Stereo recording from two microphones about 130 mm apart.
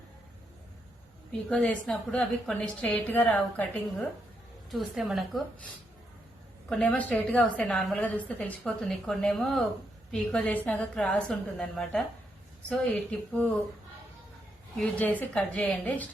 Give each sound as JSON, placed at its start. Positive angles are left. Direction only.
{"t": 1.5, "sound": "a woman's voice", "side_deg": 10}
{"t": 6.7, "sound": "a woman's voice", "side_deg": 10}
{"t": 14.8, "sound": "a woman's voice", "side_deg": 10}